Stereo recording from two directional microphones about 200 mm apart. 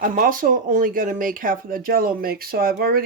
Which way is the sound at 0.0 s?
45° right (ahead or behind).